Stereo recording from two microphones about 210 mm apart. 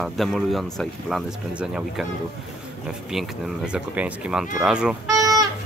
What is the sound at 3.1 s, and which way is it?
Speech, 5° right (ahead or behind).